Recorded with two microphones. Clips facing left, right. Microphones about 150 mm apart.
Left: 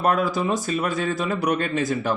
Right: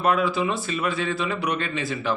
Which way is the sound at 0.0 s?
40° left (ahead or behind).